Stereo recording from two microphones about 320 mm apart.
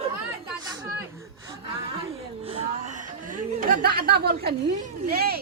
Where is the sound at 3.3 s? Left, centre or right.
Right.